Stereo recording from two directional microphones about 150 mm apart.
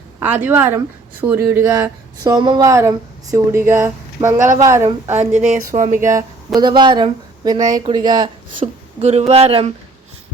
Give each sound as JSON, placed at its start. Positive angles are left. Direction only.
{"t": 0.2, "sound": "speech", "side_deg": -10}
{"t": 2.2, "sound": "speech", "side_deg": -25}
{"t": 5.3, "sound": "speech", "side_deg": -55}
{"t": 6.0, "sound": "speech", "side_deg": -20}
{"t": 6.6, "sound": "speech", "side_deg": -30}
{"t": 8.6, "sound": "speech", "side_deg": -45}